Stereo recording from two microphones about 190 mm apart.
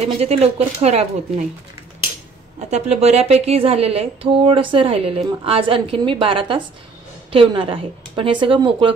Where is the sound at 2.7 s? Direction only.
35° right (ahead or behind).